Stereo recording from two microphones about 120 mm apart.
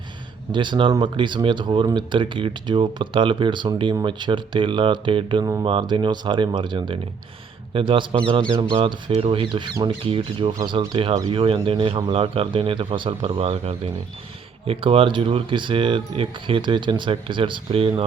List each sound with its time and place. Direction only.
0.5 s speech: 40° right (ahead or behind)